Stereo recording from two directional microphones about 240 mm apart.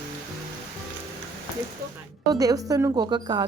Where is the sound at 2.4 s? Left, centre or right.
Centre.